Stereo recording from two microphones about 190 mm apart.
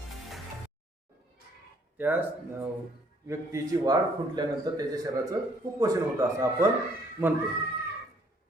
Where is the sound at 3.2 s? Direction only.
15° right (ahead or behind).